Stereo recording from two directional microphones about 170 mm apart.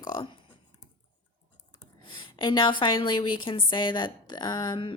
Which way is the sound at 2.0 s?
25° left (ahead or behind).